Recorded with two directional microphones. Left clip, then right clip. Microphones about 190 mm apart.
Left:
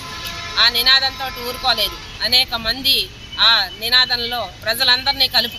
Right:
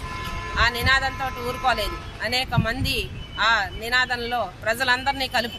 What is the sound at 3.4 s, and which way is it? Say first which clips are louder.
Speech: left 6 dB; 5° right (ahead or behind).